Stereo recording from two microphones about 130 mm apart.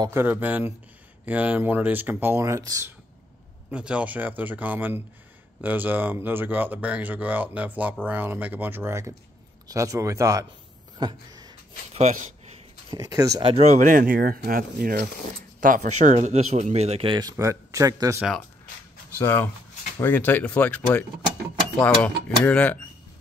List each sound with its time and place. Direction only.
0.1 s speech: 15° right (ahead or behind)
3.7 s speech: 10° right (ahead or behind); by 10.4 s 25° right (ahead or behind)
11.0 s a sound: 35° right (ahead or behind)
11.9 s speech: 65° right (ahead or behind)
12.9 s speech: 30° right (ahead or behind)
13.4 s speech: 40° right (ahead or behind)
13.7 s speech: 85° right
15.6 s speech: 80° right; by 17.2 s 45° right (ahead or behind)
17.2 s speech: 25° right (ahead or behind)
19.1 s speech: 15° left (ahead or behind)